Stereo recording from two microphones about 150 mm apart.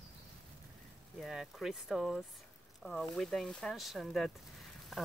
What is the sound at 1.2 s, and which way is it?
Speech, 5° right (ahead or behind).